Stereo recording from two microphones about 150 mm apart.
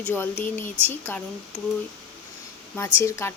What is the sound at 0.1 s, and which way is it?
Speech, 15° left (ahead or behind).